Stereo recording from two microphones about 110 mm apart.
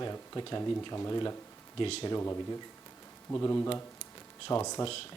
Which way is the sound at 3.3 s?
25° left (ahead or behind).